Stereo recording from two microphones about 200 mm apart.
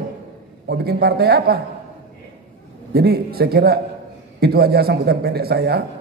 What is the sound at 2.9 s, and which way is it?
A man's voice, 50° right (ahead or behind).